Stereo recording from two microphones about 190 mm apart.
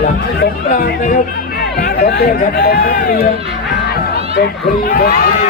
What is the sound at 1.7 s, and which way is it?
Speech, 50° left (ahead or behind).